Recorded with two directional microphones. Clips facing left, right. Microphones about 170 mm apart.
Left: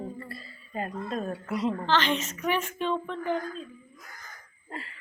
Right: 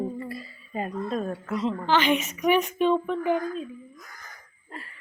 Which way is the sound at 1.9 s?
10° right (ahead or behind).